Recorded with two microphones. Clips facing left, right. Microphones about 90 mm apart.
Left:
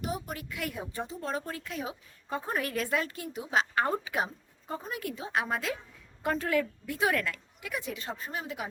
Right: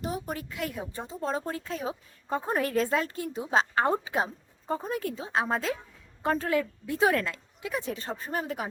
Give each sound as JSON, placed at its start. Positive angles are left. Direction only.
{"t": 0.0, "sound": "a woman's voice", "side_deg": -30}